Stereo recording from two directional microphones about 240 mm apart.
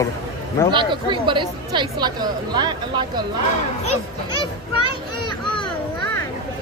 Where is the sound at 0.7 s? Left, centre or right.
Centre.